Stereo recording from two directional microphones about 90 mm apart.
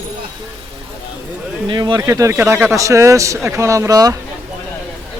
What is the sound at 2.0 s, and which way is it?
A man's voice, 35° right (ahead or behind).